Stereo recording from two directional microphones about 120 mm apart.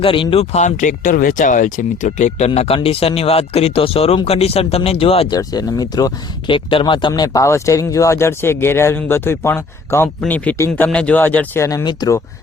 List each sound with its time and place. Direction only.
0.0 s speech: 45° left (ahead or behind)
0.5 s speech: 90° left
2.6 s speech: 50° left (ahead or behind)
5.3 s speech: 35° left (ahead or behind)
6.5 s speech: 45° left (ahead or behind)
7.1 s speech: 25° left (ahead or behind)
11.6 s speech: 30° left (ahead or behind)